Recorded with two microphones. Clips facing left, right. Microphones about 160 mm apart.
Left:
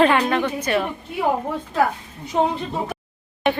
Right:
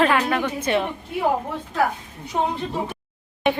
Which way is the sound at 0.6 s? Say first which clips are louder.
Even; 20° right (ahead or behind).